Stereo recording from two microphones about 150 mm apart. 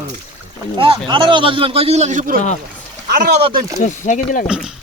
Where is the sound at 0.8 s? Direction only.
35° right (ahead or behind); by 2.4 s 60° right (ahead or behind).